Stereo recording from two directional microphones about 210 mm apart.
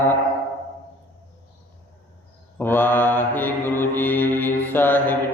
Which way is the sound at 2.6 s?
10° left (ahead or behind).